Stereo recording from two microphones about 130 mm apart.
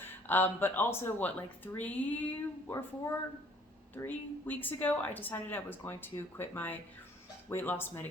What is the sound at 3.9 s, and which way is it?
Speech, 15° left (ahead or behind).